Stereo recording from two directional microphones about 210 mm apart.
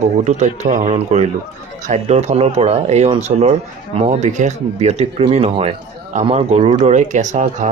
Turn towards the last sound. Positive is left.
turn(degrees=-35)  # may be behind; listen again after turning